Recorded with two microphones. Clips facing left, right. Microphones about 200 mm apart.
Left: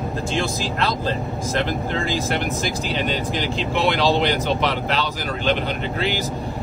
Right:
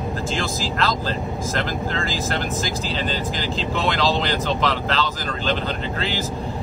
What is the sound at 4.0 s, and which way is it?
Speech, 90° right.